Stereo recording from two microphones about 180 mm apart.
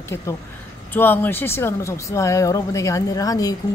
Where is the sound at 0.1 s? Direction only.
10° left (ahead or behind).